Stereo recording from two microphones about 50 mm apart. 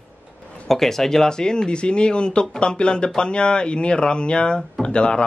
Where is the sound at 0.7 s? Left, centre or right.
Centre.